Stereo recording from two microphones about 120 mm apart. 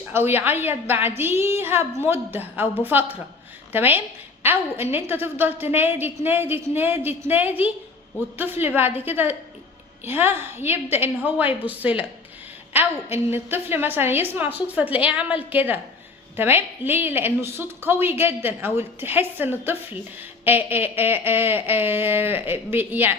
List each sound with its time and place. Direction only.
0.1 s a woman's voice: 20° right (ahead or behind)